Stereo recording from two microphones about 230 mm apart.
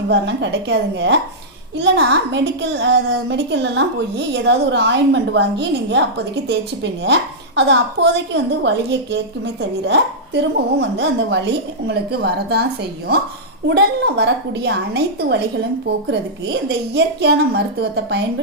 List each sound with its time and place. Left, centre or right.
0.1 s a woman's voice: right
13.7 s a woman's voice: right